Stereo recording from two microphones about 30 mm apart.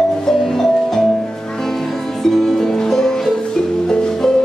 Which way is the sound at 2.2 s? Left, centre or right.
Centre.